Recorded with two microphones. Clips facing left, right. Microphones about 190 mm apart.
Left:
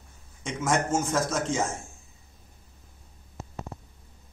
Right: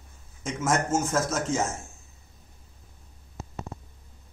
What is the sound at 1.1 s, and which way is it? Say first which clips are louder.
Speech: even; 5° right (ahead or behind).